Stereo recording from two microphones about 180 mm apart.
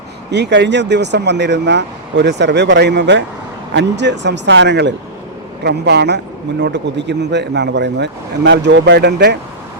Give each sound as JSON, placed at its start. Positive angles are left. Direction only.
{"t": 0.3, "sound": "speech", "side_deg": -70}